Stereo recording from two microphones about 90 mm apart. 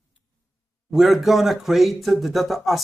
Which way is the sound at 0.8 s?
5° right (ahead or behind).